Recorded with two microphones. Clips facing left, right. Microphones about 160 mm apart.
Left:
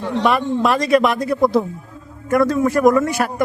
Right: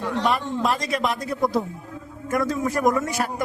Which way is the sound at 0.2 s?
70° left (ahead or behind).